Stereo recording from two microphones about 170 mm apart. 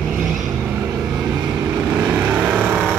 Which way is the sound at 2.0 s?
10° right (ahead or behind).